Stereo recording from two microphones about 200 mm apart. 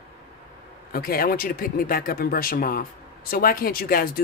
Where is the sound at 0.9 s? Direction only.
45° left (ahead or behind).